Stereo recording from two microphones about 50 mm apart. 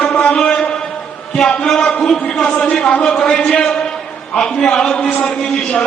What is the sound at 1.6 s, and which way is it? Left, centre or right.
Speech, centre.